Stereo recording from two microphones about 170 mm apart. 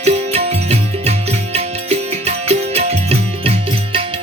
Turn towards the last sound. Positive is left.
turn(degrees=-35)  # may be behind; listen again after turning